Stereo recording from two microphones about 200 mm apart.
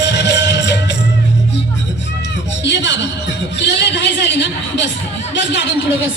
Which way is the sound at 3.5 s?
60° left (ahead or behind).